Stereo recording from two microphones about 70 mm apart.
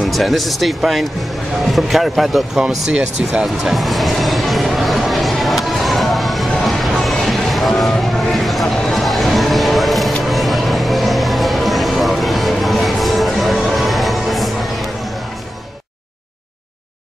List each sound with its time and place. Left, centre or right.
0.0 s speech: centre
3.4 s music: centre